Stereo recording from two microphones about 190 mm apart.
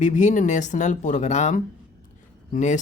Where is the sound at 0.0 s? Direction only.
40° left (ahead or behind).